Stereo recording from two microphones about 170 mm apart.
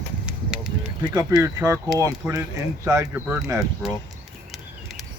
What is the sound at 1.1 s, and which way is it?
Speech, 20° right (ahead or behind).